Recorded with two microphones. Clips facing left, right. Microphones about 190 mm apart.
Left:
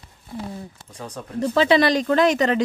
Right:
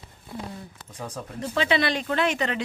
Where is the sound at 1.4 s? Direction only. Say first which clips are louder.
Left 7 dB; 35° left (ahead or behind).